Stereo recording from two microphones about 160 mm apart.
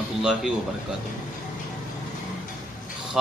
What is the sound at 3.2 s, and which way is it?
Speech, 5° right (ahead or behind).